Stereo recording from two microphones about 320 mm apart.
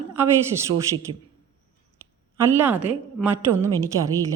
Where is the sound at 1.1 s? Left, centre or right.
Right.